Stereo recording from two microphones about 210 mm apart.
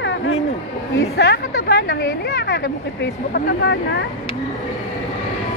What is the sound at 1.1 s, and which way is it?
Speech, 50° left (ahead or behind).